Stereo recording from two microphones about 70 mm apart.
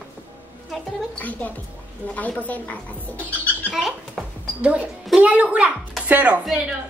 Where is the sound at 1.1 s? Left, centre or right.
Left.